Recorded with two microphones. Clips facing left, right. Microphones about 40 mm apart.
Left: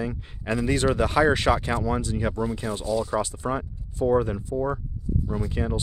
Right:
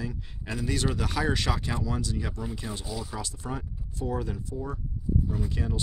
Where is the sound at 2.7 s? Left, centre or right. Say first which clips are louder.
Left 7 dB; left.